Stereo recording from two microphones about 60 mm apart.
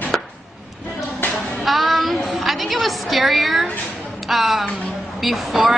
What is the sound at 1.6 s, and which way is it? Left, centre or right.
Child singing, centre.